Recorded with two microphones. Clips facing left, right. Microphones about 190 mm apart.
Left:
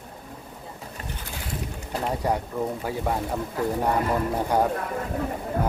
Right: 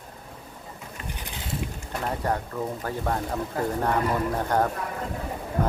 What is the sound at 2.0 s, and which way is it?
Speech, 10° left (ahead or behind).